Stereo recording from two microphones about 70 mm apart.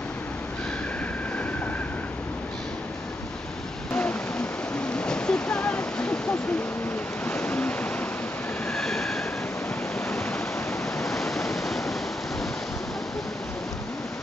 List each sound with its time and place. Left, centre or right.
3.9 s a sound: centre
7.2 s waves: centre
8.6 s train: centre
11.0 s waves: centre